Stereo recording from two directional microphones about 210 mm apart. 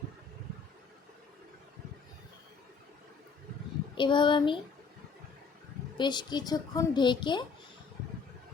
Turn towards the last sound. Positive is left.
turn(degrees=20)  # may be behind; listen again after turning